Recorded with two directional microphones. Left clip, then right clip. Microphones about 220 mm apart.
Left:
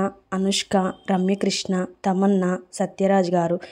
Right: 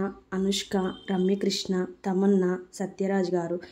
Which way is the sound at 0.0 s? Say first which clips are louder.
Left 5 dB; 35° left (ahead or behind).